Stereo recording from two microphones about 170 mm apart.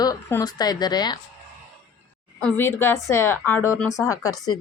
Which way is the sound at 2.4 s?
15° left (ahead or behind).